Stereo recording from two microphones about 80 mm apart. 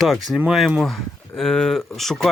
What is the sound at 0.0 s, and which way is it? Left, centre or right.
Speech, centre.